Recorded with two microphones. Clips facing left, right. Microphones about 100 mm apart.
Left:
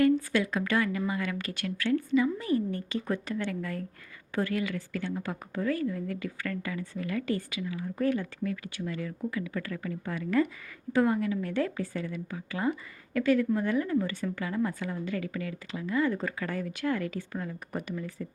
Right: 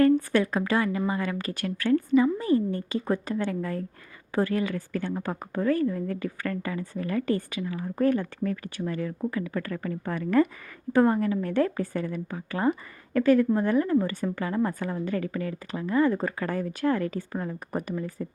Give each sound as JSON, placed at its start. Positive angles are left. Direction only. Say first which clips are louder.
{"t": 0.0, "sound": "a woman's voice", "louder": "right 4 dB", "side_deg": -40}
{"t": 0.6, "sound": "a woman's voice", "louder": "right 3 dB", "side_deg": -30}